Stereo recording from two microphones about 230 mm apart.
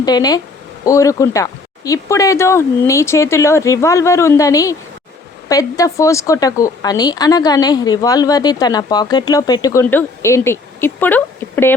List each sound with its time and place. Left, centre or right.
0.0 s speech: centre